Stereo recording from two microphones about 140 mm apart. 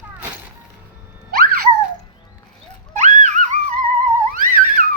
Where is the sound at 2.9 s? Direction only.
55° right (ahead or behind).